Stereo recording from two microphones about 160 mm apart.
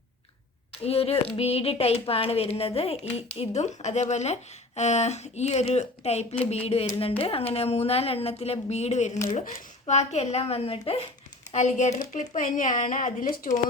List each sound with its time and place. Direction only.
0.9 s a woman's voice: 40° left (ahead or behind)